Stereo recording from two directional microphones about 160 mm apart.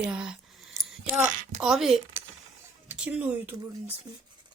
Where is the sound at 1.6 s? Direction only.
Centre (ahead or behind).